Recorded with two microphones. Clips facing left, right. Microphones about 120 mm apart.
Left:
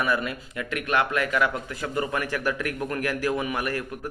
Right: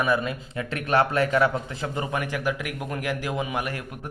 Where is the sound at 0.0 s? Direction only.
20° right (ahead or behind).